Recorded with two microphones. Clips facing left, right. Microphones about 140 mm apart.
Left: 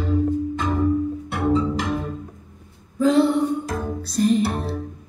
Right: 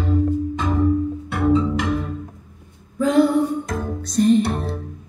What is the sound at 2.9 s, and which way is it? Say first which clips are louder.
Music: right 1 dB; 35° left (ahead or behind).